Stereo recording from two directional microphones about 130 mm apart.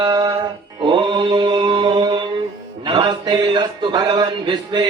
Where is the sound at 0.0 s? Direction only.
30° right (ahead or behind).